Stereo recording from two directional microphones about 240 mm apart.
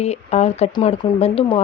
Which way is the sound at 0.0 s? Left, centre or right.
Left.